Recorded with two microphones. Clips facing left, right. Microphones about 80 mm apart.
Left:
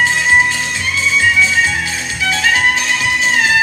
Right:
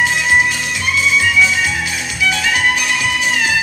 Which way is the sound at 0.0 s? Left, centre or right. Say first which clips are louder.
Left 1 dB; left.